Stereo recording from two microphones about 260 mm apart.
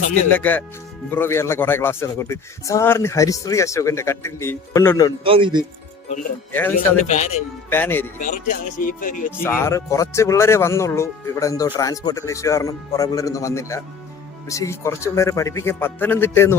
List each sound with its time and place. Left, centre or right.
0.3 s speech: centre
5.2 s speech: centre
6.1 s speech: centre
6.7 s a man's voice: left
7.7 s speech: centre
8.9 s music: left
9.4 s speech: centre